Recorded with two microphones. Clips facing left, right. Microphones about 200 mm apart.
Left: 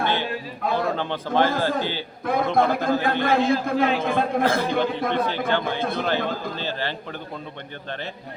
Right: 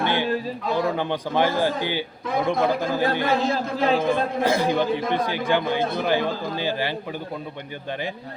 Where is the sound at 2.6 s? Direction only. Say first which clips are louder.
Left 1 dB; 50° left (ahead or behind).